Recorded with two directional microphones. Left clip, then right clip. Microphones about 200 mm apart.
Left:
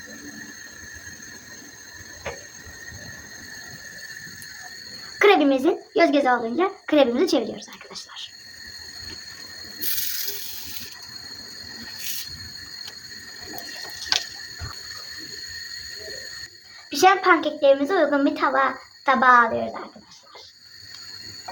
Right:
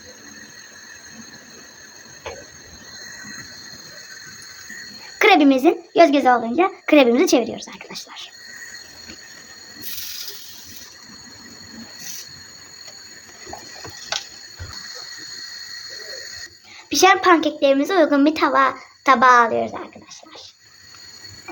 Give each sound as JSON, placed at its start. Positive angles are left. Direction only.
{"t": 5.2, "sound": "a woman's voice", "side_deg": -50}
{"t": 17.0, "sound": "a woman's voice", "side_deg": -50}